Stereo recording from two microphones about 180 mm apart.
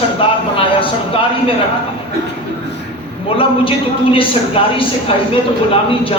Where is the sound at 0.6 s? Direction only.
30° left (ahead or behind).